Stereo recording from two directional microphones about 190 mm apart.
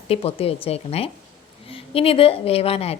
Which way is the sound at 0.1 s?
30° left (ahead or behind).